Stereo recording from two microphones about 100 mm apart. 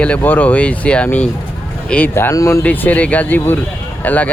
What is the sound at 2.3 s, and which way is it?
Speech, 35° left (ahead or behind).